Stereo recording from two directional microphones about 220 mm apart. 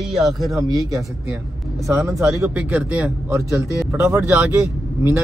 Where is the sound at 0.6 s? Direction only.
15° right (ahead or behind).